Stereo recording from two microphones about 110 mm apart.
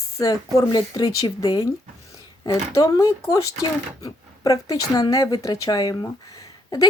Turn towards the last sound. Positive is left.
turn(degrees=35)  # may be behind; listen again after turning